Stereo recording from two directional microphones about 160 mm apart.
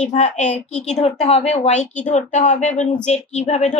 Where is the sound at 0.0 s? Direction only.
45° left (ahead or behind).